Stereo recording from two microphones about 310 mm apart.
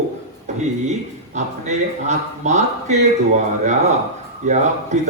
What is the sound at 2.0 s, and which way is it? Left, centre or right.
Speech, right.